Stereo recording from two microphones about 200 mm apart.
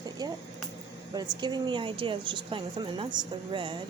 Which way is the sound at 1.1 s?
20° right (ahead or behind).